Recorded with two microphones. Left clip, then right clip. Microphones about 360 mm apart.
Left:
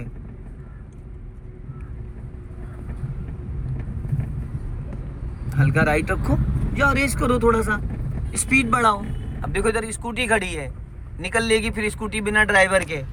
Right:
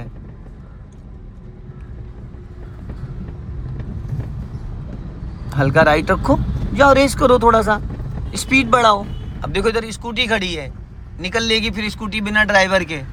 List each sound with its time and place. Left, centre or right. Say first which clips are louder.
5.5 s speech: right 8 dB; centre